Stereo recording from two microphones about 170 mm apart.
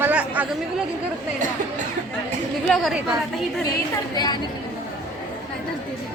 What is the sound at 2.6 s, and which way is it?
Speech, centre (ahead or behind).